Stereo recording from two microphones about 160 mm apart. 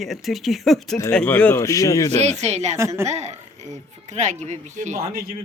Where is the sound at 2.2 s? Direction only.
45° right (ahead or behind).